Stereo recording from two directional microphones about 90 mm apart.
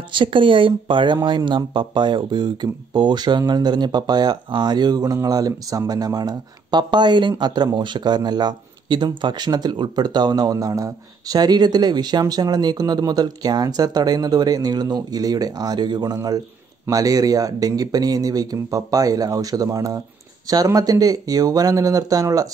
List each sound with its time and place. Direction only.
0.1 s speech: 65° right (ahead or behind); by 10.9 s 40° right (ahead or behind)
11.3 s speech: 50° right (ahead or behind)